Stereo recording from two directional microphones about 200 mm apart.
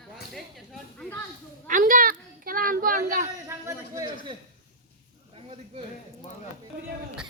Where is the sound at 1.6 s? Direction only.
40° right (ahead or behind).